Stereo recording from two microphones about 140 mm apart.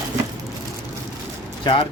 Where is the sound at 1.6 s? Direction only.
40° left (ahead or behind).